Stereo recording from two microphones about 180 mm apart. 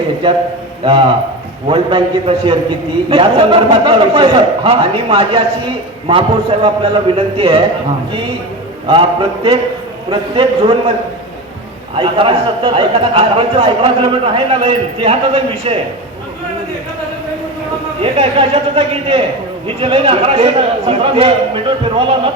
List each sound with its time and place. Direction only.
0.9 s a man's voice: 30° right (ahead or behind)
8.9 s a man's voice: 30° right (ahead or behind)
11.9 s a man's voice: 30° right (ahead or behind)
18.0 s a man's voice: 30° right (ahead or behind)